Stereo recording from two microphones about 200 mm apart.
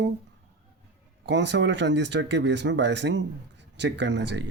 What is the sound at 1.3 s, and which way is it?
Speech, 60° right (ahead or behind).